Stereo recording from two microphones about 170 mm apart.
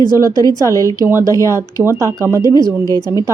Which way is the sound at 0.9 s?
15° right (ahead or behind).